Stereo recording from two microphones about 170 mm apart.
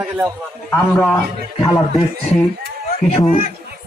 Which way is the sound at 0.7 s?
5° left (ahead or behind).